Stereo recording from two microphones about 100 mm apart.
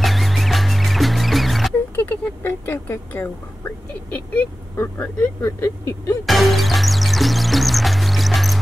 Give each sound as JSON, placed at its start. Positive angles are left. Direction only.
{"t": 0.0, "sound": "music", "side_deg": 0}
{"t": 2.0, "sound": "a sound", "side_deg": 20}
{"t": 4.1, "sound": "vehicle", "side_deg": 15}
{"t": 4.7, "sound": "speech", "side_deg": 20}
{"t": 6.2, "sound": "music", "side_deg": 0}